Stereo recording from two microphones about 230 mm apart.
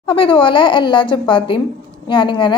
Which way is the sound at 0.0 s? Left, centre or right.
Left.